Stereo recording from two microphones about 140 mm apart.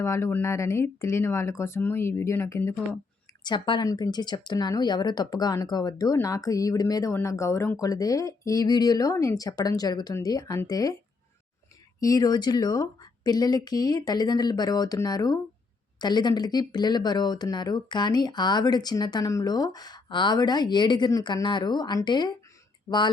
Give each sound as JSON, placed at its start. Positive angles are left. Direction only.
{"t": 0.0, "sound": "speech", "side_deg": 20}
{"t": 3.4, "sound": "speech", "side_deg": 30}
{"t": 11.9, "sound": "speech", "side_deg": 25}